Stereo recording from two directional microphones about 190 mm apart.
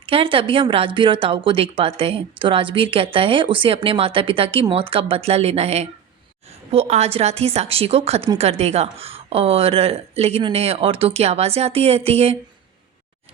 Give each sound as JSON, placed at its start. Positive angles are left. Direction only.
{"t": 0.0, "sound": "a woman's voice", "side_deg": -30}